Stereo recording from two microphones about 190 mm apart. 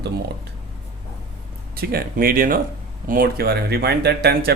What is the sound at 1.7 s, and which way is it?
Speech, 50° right (ahead or behind).